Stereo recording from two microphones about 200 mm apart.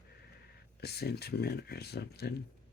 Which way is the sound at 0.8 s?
55° left (ahead or behind).